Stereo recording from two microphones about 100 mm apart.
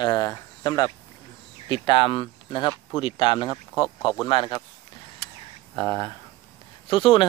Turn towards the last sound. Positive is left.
turn(degrees=60)  # may be behind; listen again after turning